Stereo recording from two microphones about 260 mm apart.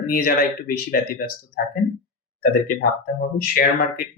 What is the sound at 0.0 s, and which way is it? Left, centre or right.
Speech, left.